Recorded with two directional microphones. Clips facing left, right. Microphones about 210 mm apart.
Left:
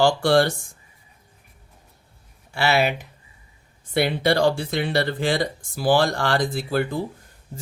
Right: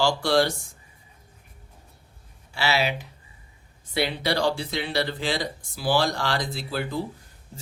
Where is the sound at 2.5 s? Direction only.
55° left (ahead or behind).